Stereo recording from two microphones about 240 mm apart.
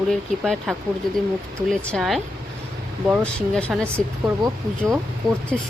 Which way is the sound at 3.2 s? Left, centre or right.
Centre.